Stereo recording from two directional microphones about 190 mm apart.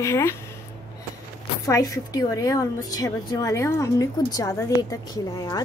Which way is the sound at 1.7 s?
20° left (ahead or behind).